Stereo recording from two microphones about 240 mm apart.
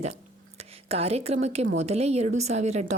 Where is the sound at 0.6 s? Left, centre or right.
Right.